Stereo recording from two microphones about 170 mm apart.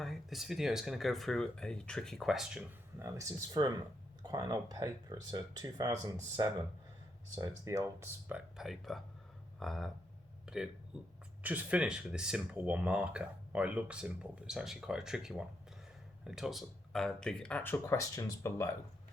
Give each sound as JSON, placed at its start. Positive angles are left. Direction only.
{"t": 0.0, "sound": "speech", "side_deg": 0}
{"t": 3.0, "sound": "speech", "side_deg": -20}
{"t": 8.5, "sound": "speech", "side_deg": 0}